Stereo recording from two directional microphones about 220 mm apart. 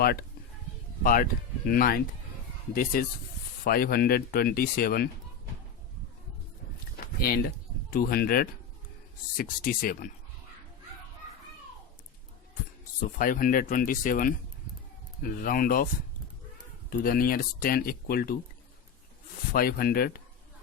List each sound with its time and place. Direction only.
0.0 s speech: 45° left (ahead or behind)
6.9 s a sound: 40° left (ahead or behind)
7.9 s speech: 45° left (ahead or behind)
13.1 s speech: 40° left (ahead or behind)
16.9 s speech: 40° left (ahead or behind)
19.5 s speech: 40° left (ahead or behind)